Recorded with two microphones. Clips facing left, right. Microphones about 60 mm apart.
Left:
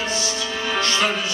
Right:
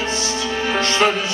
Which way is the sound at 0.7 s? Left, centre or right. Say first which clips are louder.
Right 3 dB; right.